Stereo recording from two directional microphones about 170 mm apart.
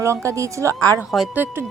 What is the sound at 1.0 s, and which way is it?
Speech, 5° right (ahead or behind).